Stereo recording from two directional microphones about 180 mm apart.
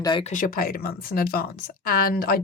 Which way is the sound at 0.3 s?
45° left (ahead or behind).